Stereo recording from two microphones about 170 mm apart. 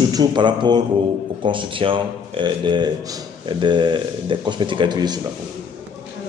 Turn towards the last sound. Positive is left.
turn(degrees=-25)  # may be behind; listen again after turning